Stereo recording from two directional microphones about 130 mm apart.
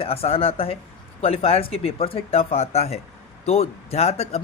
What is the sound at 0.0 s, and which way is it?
Speech, 50° left (ahead or behind).